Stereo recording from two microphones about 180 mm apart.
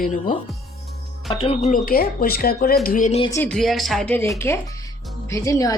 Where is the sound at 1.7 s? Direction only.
50° left (ahead or behind).